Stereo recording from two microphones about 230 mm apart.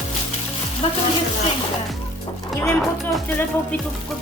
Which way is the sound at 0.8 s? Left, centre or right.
Left.